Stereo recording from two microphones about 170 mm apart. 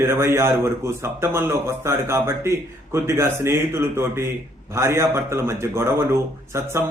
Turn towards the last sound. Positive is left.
turn(degrees=-15)  # may be behind; listen again after turning